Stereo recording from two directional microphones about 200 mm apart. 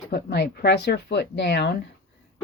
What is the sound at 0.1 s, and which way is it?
Speech, 55° left (ahead or behind).